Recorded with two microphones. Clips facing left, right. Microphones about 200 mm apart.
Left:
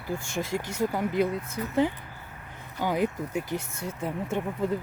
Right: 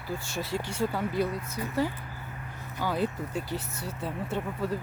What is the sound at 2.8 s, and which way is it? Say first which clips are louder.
Speech: left 3 dB; 15° left (ahead or behind).